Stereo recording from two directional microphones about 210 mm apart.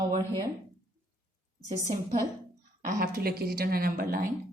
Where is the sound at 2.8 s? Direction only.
45° right (ahead or behind).